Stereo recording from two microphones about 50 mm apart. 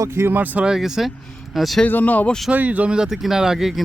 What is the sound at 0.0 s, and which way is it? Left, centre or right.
Speech, right.